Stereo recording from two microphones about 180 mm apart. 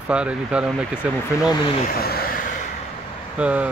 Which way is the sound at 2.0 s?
60° left (ahead or behind).